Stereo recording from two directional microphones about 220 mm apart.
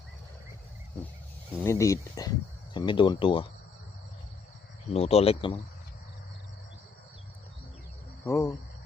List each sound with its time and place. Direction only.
1.6 s speech: 15° left (ahead or behind)
4.9 s speech: 30° left (ahead or behind)
8.2 s speech: 15° left (ahead or behind)